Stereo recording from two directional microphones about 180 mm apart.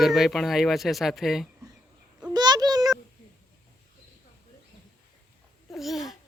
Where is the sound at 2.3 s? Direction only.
25° right (ahead or behind).